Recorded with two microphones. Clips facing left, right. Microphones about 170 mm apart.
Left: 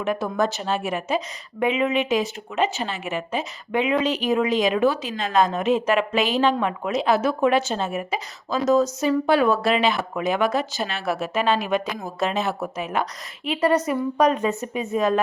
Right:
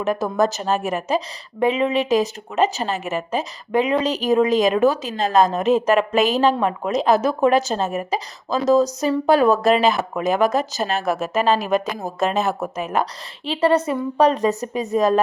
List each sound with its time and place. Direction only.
0.0 s speech: 40° right (ahead or behind)